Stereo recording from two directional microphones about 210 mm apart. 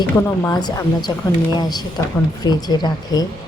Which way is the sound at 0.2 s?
15° left (ahead or behind).